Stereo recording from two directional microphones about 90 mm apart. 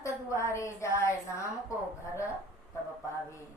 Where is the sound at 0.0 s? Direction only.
35° left (ahead or behind).